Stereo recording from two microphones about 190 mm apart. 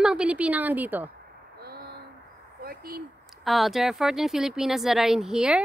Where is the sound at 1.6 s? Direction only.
55° right (ahead or behind).